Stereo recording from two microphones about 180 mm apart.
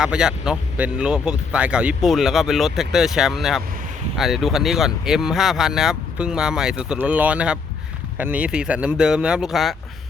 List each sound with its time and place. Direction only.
0.0 s speech: 5° right (ahead or behind)